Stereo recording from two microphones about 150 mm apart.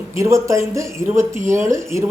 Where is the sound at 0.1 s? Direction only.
20° right (ahead or behind).